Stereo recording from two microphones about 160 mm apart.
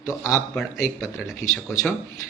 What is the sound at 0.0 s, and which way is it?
Speech, 20° left (ahead or behind).